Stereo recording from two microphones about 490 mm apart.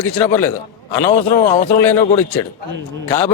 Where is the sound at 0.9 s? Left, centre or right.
Left.